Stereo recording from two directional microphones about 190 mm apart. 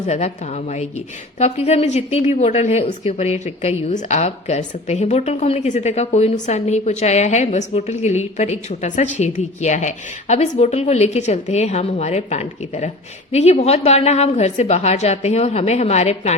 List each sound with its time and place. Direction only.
0.0 s a woman's voice: 35° left (ahead or behind)